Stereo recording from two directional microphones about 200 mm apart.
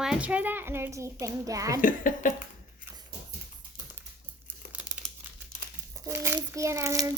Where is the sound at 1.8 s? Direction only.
40° left (ahead or behind).